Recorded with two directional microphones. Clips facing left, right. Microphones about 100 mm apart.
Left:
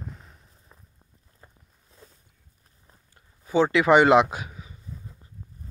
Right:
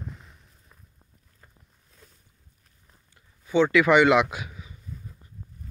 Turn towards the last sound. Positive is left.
turn(degrees=35)  # may be behind; listen again after turning